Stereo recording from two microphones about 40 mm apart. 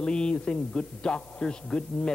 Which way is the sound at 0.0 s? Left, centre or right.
Left.